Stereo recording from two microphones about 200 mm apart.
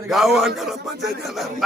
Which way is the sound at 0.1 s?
Centre (ahead or behind).